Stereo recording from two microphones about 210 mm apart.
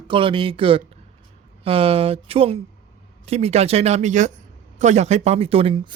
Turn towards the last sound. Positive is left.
turn(degrees=-25)  # may be behind; listen again after turning